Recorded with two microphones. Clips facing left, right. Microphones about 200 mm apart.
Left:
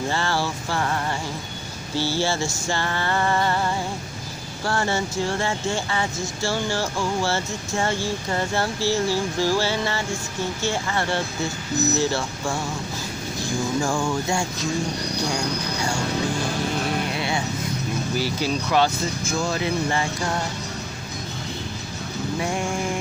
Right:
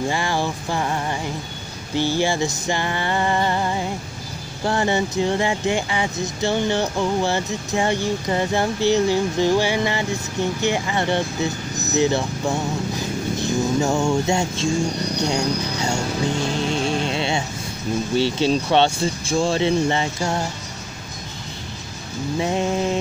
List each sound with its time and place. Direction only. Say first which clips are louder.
0.1 s speech: right 2 dB; 15° right (ahead or behind)
22.4 s speech: right 6 dB; 20° right (ahead or behind)